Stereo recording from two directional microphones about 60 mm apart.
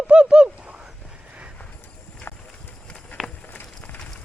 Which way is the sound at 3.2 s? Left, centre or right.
Centre.